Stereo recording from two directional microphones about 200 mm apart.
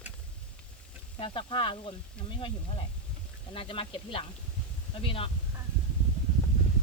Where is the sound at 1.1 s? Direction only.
25° left (ahead or behind).